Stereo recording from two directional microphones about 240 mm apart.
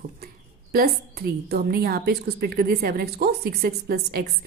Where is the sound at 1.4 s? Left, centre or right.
Right.